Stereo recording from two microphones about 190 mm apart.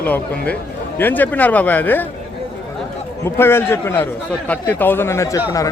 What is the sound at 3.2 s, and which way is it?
A man's voice, 10° left (ahead or behind).